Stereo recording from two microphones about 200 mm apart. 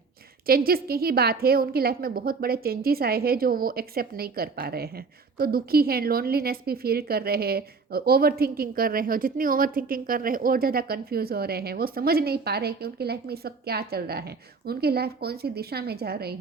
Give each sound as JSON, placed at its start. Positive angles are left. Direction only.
{"t": 0.4, "sound": "a woman's voice", "side_deg": -50}